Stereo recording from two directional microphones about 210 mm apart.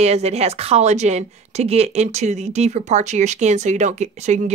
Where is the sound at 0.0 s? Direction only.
30° right (ahead or behind).